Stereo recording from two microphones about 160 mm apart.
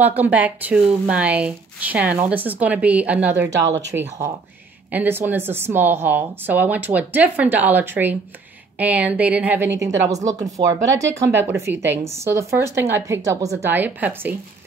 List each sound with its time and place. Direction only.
0.0 s speech: 10° right (ahead or behind)
9.8 s speech: 20° right (ahead or behind)